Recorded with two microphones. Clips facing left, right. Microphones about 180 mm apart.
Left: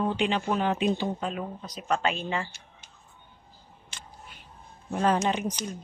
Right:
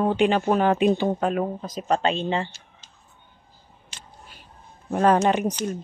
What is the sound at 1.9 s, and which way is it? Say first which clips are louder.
Speech: right 5 dB; 30° right (ahead or behind).